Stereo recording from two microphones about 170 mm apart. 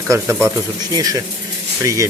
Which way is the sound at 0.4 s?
20° right (ahead or behind).